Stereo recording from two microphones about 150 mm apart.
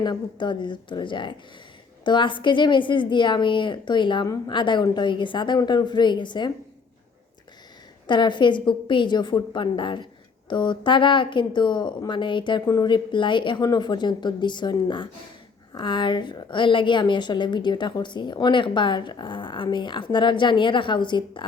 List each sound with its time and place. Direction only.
0.0 s a woman's voice: 30° left (ahead or behind)
8.0 s a woman's voice: 30° left (ahead or behind)